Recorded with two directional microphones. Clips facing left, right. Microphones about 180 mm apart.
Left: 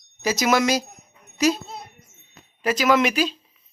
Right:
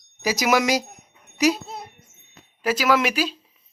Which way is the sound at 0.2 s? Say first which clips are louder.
Even; 10° right (ahead or behind).